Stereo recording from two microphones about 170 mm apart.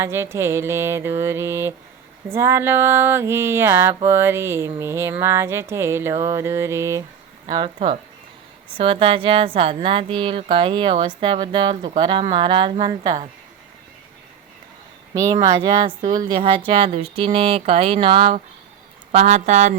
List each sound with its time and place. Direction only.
0.0 s a sound: 15° right (ahead or behind)
7.4 s speech: 30° right (ahead or behind)
15.1 s speech: 20° right (ahead or behind); by 19.7 s 45° right (ahead or behind)